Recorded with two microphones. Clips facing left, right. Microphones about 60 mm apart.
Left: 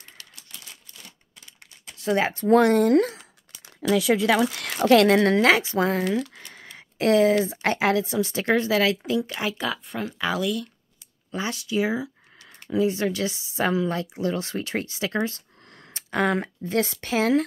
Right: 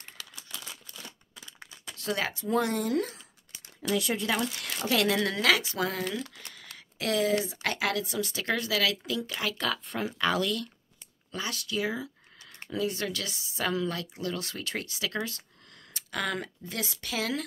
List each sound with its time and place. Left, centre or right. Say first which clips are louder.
2.0 s speech: left 8 dB; left
2.3 s speech: left 13 dB; left
4.3 s speech: left 8 dB; left; by 10.7 s centre
11.3 s speech: left 7 dB; left